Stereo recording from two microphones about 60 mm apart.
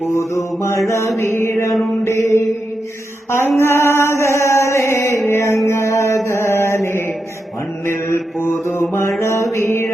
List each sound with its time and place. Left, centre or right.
0.1 s mantra: left
1.2 s music: left
1.7 s mantra: centre
2.0 s mantra: left
3.2 s music: left
5.2 s music: left
7.9 s mantra: left